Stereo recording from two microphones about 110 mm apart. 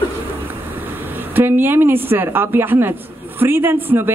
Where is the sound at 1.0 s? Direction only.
20° right (ahead or behind).